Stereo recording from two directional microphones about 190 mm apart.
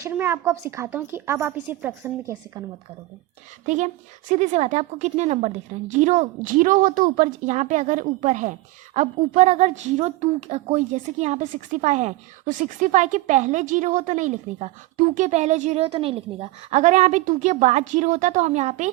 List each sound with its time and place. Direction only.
0.0 s a woman's voice: 10° right (ahead or behind)
4.3 s a woman's voice: 35° right (ahead or behind)